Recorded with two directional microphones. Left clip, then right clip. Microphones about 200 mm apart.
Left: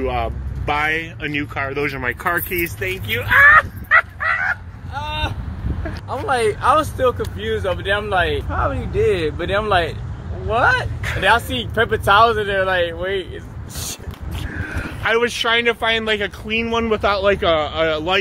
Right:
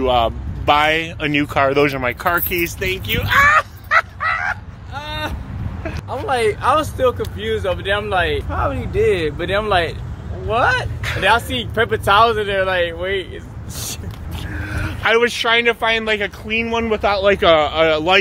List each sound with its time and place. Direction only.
0.0 s speech: 25° right (ahead or behind)
2.0 s a sound: 15° right (ahead or behind)
5.9 s speech: centre (ahead or behind)
8.5 s speech: 15° right (ahead or behind)
14.8 s a sound: 35° right (ahead or behind)
15.2 s speech: 5° right (ahead or behind); by 17.2 s 15° left (ahead or behind)
17.6 s speech: 30° right (ahead or behind)